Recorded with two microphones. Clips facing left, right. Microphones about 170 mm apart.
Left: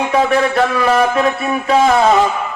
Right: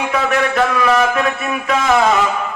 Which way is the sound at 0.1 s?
30° left (ahead or behind).